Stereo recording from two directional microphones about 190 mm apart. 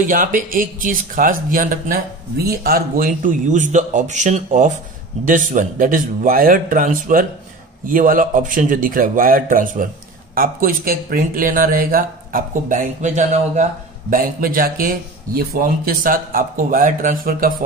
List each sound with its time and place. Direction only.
0.0 s speech: 45° right (ahead or behind)